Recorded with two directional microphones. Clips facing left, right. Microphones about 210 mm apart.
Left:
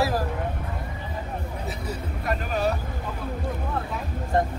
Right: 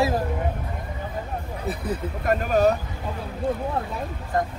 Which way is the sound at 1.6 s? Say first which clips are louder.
Right 4 dB; 55° right (ahead or behind).